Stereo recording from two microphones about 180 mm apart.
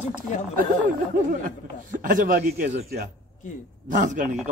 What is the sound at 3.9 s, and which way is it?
Speech, 45° right (ahead or behind).